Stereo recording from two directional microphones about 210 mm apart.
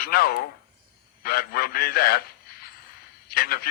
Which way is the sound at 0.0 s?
45° left (ahead or behind).